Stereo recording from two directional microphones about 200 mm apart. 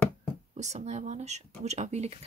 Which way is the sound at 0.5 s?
35° right (ahead or behind).